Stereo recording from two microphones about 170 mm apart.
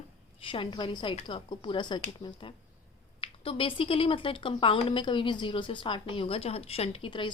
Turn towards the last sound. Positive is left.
turn(degrees=30)  # may be behind; listen again after turning